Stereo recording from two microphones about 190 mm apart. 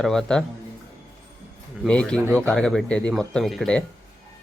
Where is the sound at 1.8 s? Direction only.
5° left (ahead or behind).